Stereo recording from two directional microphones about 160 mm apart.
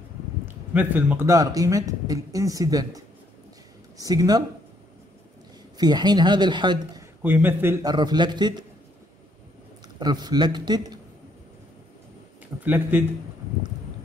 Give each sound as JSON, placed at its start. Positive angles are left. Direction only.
{"t": 0.7, "sound": "speech", "side_deg": -10}
{"t": 4.0, "sound": "speech", "side_deg": -25}
{"t": 5.8, "sound": "speech", "side_deg": -25}
{"t": 7.2, "sound": "a man's voice", "side_deg": -10}
{"t": 7.8, "sound": "speech", "side_deg": -25}
{"t": 9.9, "sound": "speech", "side_deg": -25}
{"t": 12.6, "sound": "a man's voice", "side_deg": -15}